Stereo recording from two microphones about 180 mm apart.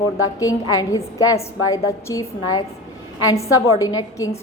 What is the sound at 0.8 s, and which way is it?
A woman's voice, 20° left (ahead or behind).